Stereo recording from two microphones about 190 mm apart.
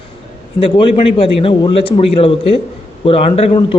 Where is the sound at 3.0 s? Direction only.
30° left (ahead or behind).